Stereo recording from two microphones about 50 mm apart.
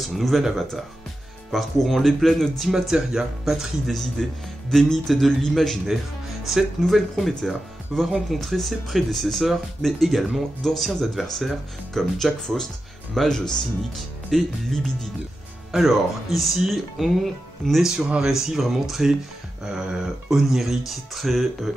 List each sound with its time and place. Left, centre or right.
0.1 s speech: centre
2.7 s speech: centre
4.2 s a man's voice: centre
17.9 s speech: centre
18.6 s speech: centre
19.6 s speech: centre